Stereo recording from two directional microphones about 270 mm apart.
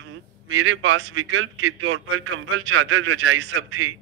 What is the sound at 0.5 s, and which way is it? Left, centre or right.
A man's voice, right.